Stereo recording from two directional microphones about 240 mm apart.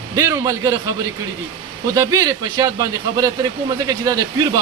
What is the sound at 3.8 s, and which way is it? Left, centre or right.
Speech, centre.